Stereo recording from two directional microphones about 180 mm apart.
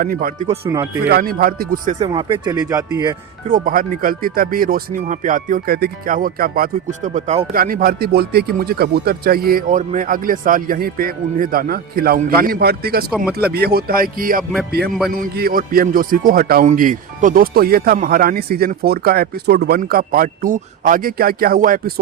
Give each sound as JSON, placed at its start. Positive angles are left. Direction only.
{"t": 0.0, "sound": "speech", "side_deg": -50}
{"t": 0.6, "sound": "speech", "side_deg": -20}
{"t": 1.1, "sound": "speech", "side_deg": -55}
{"t": 2.0, "sound": "speech", "side_deg": -25}
{"t": 3.5, "sound": "speech", "side_deg": -50}
{"t": 7.5, "sound": "speech", "side_deg": -55}